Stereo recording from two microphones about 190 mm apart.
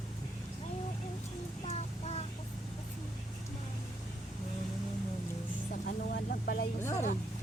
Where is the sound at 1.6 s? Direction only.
35° left (ahead or behind).